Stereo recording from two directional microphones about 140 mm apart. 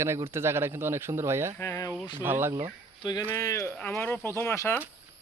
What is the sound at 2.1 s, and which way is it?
Speech, 15° right (ahead or behind).